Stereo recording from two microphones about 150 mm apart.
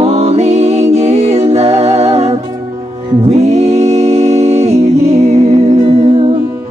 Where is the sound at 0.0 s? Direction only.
45° right (ahead or behind).